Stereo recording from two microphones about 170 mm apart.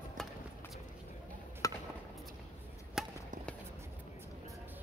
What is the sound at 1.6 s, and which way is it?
Chop, 20° left (ahead or behind).